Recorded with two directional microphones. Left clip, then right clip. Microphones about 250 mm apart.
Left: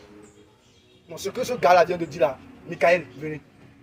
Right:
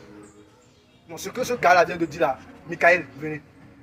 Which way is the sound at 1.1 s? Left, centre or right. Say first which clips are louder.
Even; left.